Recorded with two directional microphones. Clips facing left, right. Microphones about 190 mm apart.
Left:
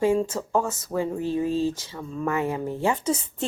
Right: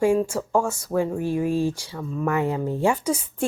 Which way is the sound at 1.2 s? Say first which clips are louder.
Right 1 dB; 15° right (ahead or behind).